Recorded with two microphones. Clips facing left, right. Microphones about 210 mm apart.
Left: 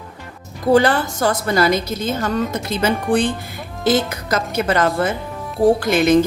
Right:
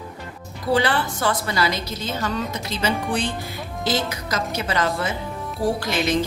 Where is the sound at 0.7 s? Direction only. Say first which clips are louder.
Left 6 dB; 45° left (ahead or behind).